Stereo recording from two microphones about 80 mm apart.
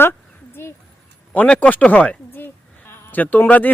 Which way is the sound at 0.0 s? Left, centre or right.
Left.